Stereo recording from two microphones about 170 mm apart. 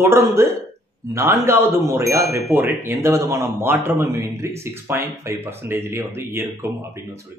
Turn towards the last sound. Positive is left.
turn(degrees=-15)  # may be behind; listen again after turning